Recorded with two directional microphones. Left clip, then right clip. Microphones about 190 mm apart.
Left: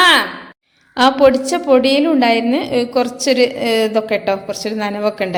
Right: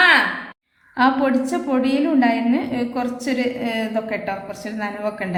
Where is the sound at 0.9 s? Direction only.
35° left (ahead or behind).